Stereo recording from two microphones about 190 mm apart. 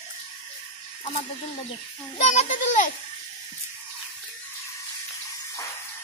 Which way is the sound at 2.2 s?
40° left (ahead or behind).